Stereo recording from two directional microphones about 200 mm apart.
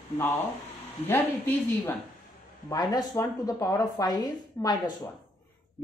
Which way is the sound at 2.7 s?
20° left (ahead or behind).